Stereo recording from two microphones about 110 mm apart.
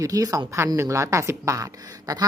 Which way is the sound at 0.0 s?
35° right (ahead or behind).